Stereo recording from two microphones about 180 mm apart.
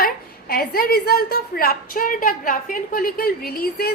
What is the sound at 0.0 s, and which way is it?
A woman's voice, 55° left (ahead or behind).